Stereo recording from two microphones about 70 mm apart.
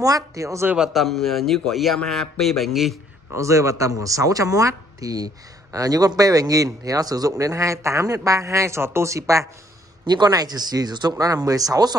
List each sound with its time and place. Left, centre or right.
0.0 s speech: right
0.7 s a man's voice: centre
3.3 s speech: right
10.0 s speech: right